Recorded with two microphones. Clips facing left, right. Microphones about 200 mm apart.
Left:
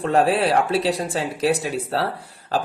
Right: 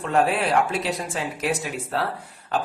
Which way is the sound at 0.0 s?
35° left (ahead or behind).